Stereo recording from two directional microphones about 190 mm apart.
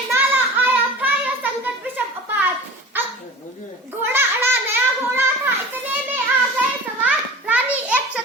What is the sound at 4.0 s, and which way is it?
Children playing, 10° right (ahead or behind).